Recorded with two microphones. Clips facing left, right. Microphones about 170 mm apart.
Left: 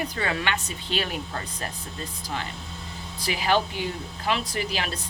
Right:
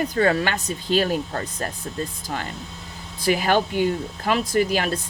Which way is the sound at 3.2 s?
50° right (ahead or behind).